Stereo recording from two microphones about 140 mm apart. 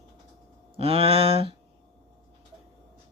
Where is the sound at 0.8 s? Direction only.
45° right (ahead or behind).